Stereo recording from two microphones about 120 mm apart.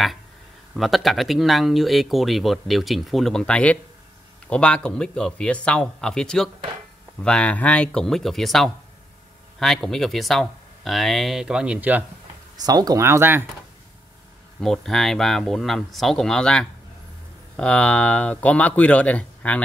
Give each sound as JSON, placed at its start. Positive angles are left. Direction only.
{"t": 0.7, "sound": "speech", "side_deg": 0}
{"t": 12.5, "sound": "speech", "side_deg": -35}
{"t": 14.6, "sound": "speech", "side_deg": 5}